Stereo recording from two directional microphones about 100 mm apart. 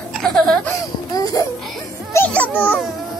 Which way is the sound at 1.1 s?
40° left (ahead or behind).